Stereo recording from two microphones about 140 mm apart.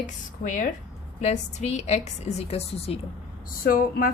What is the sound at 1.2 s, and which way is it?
A woman's voice, 55° left (ahead or behind).